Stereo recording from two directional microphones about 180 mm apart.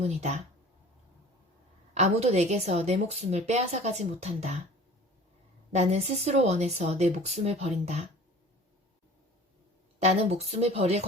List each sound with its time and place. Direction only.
0.0 s a woman's voice: 40° right (ahead or behind)
1.9 s a woman's voice: 40° right (ahead or behind)
5.7 s a woman's voice: 40° right (ahead or behind)
10.0 s a woman's voice: 35° right (ahead or behind)